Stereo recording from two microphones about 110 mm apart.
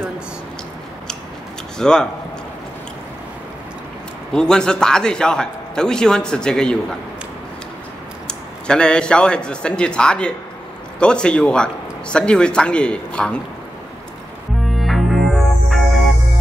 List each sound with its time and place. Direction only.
1.8 s a man's voice: 5° left (ahead or behind)
4.3 s a man's voice: 5° left (ahead or behind)
8.3 s a man's voice: 10° left (ahead or behind)
14.8 s music: centre (ahead or behind)